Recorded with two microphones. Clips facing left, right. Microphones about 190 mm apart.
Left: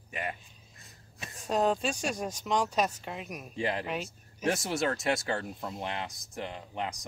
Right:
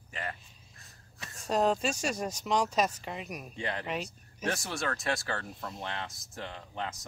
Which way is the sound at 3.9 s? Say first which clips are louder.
Even; centre (ahead or behind).